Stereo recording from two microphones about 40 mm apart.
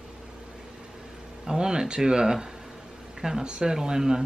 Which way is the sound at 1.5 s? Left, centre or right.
Centre.